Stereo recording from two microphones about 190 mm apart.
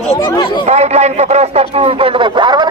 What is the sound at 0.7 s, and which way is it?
A man's voice, 35° right (ahead or behind).